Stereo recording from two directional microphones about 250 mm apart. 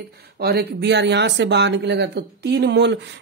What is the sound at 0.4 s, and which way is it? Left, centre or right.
Speech, right.